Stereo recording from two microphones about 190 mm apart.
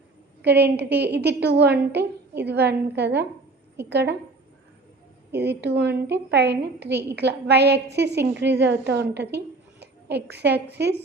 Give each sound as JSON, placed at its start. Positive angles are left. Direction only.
{"t": 0.4, "sound": "a woman's voice", "side_deg": -60}
{"t": 5.3, "sound": "a woman's voice", "side_deg": -60}